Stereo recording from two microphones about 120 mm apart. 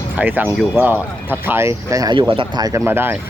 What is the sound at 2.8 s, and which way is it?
Speech, 20° right (ahead or behind).